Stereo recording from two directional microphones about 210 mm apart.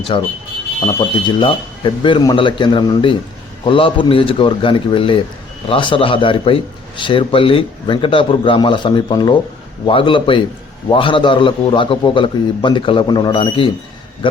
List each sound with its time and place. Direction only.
0.1 s a man's voice: 25° left (ahead or behind)